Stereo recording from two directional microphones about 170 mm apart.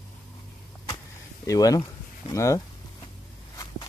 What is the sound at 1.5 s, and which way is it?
Speech, 20° left (ahead or behind).